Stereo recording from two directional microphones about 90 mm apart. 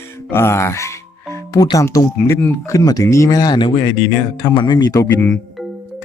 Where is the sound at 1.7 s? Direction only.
40° left (ahead or behind).